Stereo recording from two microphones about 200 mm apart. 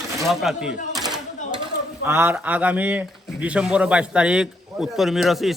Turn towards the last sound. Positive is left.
turn(degrees=0)  # may be behind; listen again after turning